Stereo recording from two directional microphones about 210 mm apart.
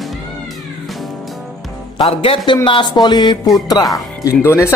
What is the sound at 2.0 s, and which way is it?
Speech, 25° left (ahead or behind).